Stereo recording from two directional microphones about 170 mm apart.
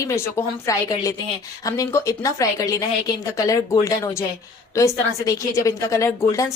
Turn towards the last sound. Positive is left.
turn(degrees=15)  # may be behind; listen again after turning